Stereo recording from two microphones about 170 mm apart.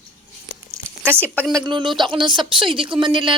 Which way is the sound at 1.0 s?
10° right (ahead or behind).